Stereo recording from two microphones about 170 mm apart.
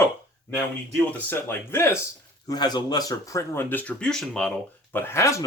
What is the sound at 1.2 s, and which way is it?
Speech, 10° left (ahead or behind).